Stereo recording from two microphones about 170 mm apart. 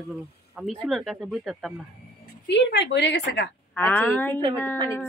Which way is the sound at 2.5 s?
90° left.